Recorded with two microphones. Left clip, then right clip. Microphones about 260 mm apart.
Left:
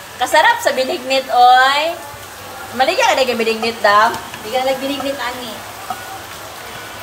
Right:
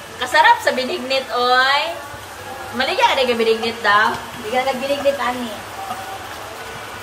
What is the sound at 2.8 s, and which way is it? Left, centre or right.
A woman's voice, centre.